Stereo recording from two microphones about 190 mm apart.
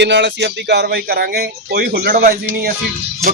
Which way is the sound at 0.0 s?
65° right (ahead or behind).